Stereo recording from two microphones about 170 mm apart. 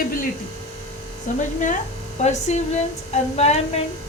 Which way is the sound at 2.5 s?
40° left (ahead or behind).